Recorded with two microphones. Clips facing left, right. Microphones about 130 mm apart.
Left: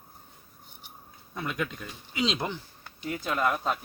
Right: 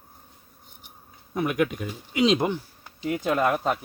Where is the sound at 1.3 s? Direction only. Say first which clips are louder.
Right 8 dB; 15° right (ahead or behind).